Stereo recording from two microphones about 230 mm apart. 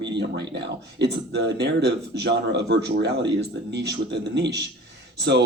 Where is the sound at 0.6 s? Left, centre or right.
Right.